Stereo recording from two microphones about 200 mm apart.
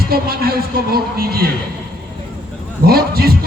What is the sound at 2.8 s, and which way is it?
Speech, 50° right (ahead or behind).